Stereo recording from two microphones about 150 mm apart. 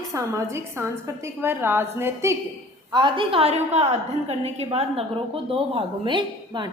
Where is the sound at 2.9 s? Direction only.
30° right (ahead or behind).